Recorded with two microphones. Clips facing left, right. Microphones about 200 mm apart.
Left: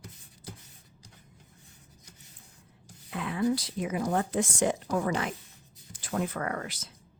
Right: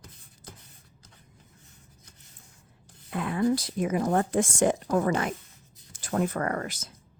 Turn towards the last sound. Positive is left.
turn(degrees=-45)  # may be behind; listen again after turning